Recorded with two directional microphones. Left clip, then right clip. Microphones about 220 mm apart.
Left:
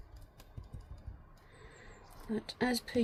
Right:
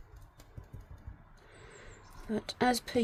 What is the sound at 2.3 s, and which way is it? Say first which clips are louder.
Speech: right 5 dB; 55° right (ahead or behind).